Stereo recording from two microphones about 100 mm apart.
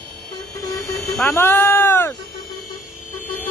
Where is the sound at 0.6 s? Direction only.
40° left (ahead or behind).